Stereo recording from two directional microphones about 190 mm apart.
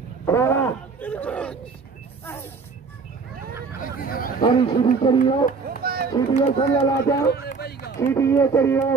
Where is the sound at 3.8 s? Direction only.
50° left (ahead or behind).